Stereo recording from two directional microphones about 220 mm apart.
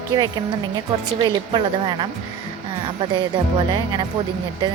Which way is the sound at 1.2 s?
20° right (ahead or behind).